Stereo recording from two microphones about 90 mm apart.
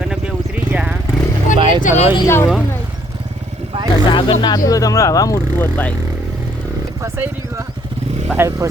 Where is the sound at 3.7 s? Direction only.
80° right.